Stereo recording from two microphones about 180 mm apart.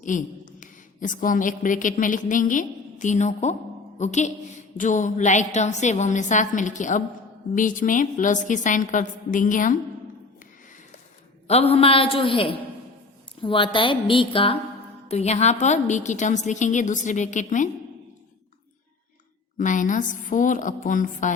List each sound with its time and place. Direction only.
0.0 s a woman's voice: 45° left (ahead or behind)
11.4 s a woman's voice: 35° left (ahead or behind)
19.5 s a woman's voice: 45° left (ahead or behind)